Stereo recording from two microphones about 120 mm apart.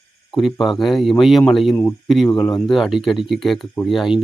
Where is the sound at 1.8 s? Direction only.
15° left (ahead or behind).